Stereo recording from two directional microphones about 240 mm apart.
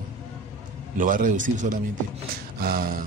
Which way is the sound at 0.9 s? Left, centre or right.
Right.